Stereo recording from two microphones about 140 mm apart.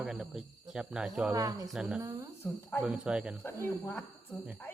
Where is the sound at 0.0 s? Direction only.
5° right (ahead or behind).